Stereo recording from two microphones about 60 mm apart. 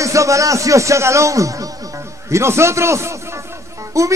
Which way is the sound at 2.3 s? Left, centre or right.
Right.